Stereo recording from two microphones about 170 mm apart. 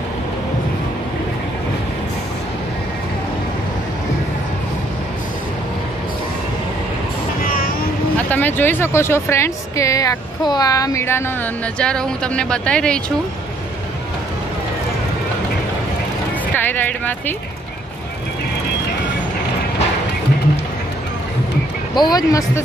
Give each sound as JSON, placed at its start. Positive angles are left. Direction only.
{"t": 7.4, "sound": "a sound", "side_deg": 55}
{"t": 8.3, "sound": "a woman's voice", "side_deg": 10}
{"t": 11.8, "sound": "speech", "side_deg": 5}
{"t": 16.5, "sound": "speech", "side_deg": 10}
{"t": 21.9, "sound": "speech", "side_deg": 25}